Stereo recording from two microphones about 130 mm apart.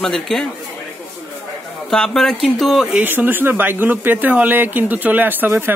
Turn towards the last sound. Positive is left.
turn(degrees=-15)  # may be behind; listen again after turning